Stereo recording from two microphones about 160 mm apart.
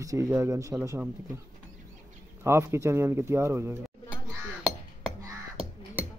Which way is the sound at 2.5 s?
15° right (ahead or behind).